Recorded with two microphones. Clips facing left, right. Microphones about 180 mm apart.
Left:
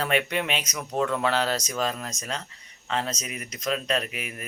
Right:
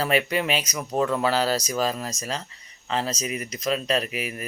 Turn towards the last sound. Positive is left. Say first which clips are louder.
# right 3 dB
turn(degrees=-5)  # may be behind; listen again after turning